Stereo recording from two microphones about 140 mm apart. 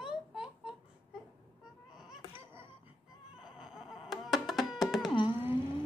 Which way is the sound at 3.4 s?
5° right (ahead or behind).